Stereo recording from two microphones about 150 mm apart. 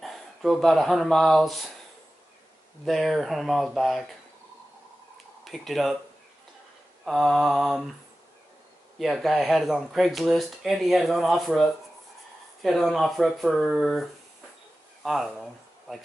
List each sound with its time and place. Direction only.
0.0 s speech: centre (ahead or behind)
2.8 s speech: centre (ahead or behind)
5.4 s speech: centre (ahead or behind)
7.1 s speech: centre (ahead or behind)
8.9 s speech: centre (ahead or behind)
15.0 s speech: centre (ahead or behind)